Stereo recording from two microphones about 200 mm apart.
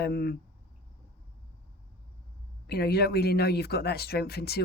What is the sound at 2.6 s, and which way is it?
Speech, 50° left (ahead or behind).